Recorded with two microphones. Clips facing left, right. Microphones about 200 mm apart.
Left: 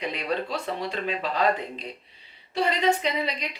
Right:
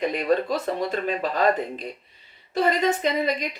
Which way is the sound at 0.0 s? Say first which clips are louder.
Right 6 dB; 45° right (ahead or behind).